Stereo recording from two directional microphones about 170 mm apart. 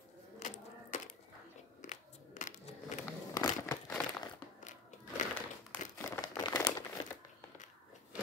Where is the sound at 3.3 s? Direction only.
15° left (ahead or behind).